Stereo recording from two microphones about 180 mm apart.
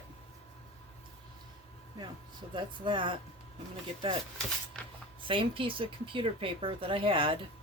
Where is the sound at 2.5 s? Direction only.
25° right (ahead or behind).